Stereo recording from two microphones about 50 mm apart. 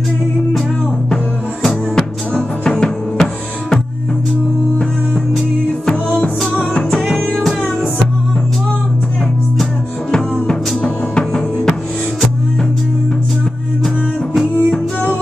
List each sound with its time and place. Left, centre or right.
2.3 s music: left
6.9 s music: centre
10.4 s music: centre
14.3 s music: centre